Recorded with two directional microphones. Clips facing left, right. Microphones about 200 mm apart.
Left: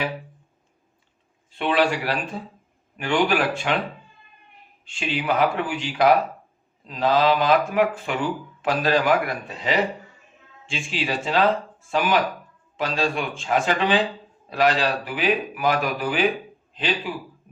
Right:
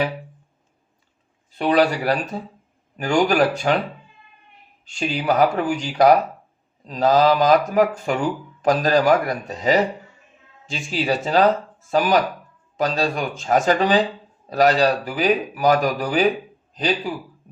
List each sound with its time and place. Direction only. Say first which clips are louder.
1.5 s speech: right 4 dB; 40° right (ahead or behind)
4.9 s speech: right 3 dB; 40° right (ahead or behind)